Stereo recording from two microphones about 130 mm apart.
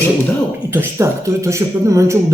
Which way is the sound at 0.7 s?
20° right (ahead or behind).